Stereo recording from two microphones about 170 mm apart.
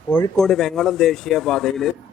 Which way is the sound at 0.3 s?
Centre (ahead or behind).